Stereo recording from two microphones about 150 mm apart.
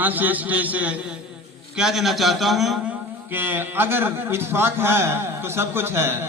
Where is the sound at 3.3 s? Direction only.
15° right (ahead or behind).